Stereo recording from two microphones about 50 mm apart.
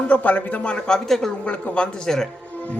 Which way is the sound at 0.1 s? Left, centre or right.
Left.